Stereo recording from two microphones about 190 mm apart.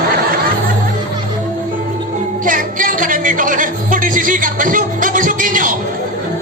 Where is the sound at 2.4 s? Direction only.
45° right (ahead or behind).